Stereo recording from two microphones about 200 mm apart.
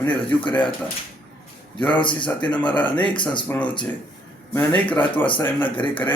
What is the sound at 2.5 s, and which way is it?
Speech, 5° left (ahead or behind).